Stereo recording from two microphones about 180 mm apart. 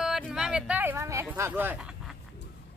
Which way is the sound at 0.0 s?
5° right (ahead or behind).